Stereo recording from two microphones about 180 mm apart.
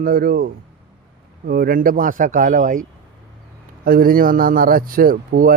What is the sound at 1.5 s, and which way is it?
Speech, 55° right (ahead or behind).